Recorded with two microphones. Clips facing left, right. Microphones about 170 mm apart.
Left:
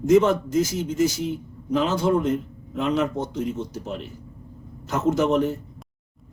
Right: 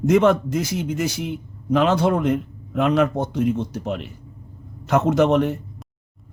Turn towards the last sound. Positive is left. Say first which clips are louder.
# right 3 dB
turn(degrees=-70)  # may be behind; listen again after turning